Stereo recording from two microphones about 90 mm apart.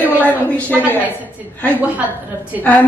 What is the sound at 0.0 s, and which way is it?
A woman's voice, 20° left (ahead or behind).